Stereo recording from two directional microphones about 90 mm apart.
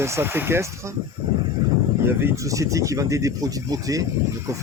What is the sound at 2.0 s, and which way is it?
Speech, 25° right (ahead or behind).